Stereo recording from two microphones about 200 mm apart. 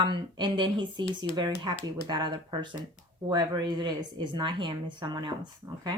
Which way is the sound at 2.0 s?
20° right (ahead or behind).